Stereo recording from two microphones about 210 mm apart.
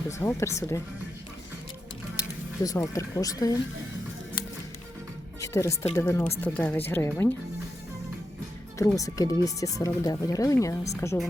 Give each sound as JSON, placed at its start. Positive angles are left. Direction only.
{"t": 0.1, "sound": "speech", "side_deg": 15}
{"t": 2.6, "sound": "speech", "side_deg": 15}
{"t": 5.4, "sound": "music", "side_deg": 15}
{"t": 5.9, "sound": "speech", "side_deg": 10}
{"t": 9.0, "sound": "speech", "side_deg": 15}